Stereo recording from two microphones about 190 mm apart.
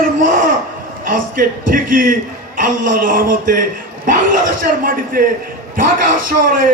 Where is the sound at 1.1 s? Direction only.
45° right (ahead or behind).